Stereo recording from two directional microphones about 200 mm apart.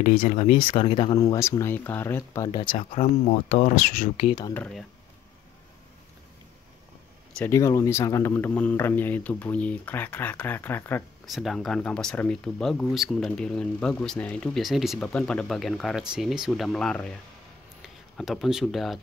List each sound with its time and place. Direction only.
0.0 s speech: 40° left (ahead or behind)
0.7 s a man's voice: 25° left (ahead or behind)
3.3 s speech: 40° left (ahead or behind)
4.6 s speech: 5° left (ahead or behind)
7.3 s a man's voice: 15° left (ahead or behind)